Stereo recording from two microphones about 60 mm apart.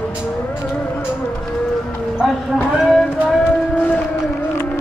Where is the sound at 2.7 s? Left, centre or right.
Centre.